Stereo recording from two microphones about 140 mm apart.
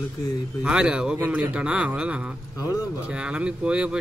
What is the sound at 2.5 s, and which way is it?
Speech, 25° left (ahead or behind).